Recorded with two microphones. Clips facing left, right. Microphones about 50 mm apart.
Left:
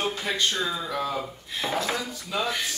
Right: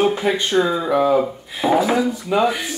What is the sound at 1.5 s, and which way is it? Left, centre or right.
Speech, centre.